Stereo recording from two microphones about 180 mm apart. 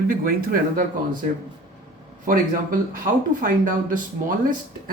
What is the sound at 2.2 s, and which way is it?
Speech, 50° right (ahead or behind).